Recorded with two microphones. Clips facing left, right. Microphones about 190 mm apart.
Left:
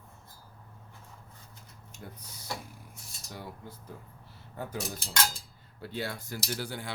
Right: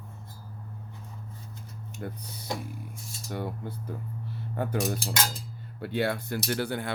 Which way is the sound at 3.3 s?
60° right (ahead or behind).